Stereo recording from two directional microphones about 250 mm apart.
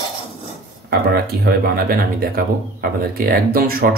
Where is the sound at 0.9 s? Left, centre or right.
Right.